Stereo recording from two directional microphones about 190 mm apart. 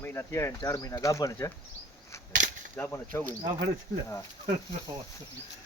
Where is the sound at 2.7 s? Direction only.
10° left (ahead or behind).